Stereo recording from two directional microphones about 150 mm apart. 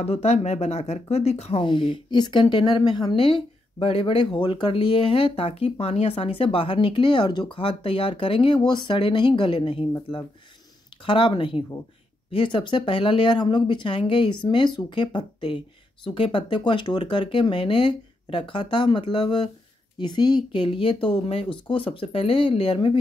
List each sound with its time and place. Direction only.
0.0 s speech: 45° left (ahead or behind)